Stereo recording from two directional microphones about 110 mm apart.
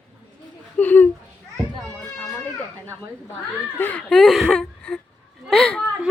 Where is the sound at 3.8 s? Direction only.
20° left (ahead or behind).